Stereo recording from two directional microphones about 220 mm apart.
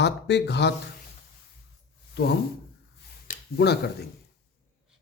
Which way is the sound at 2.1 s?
45° left (ahead or behind).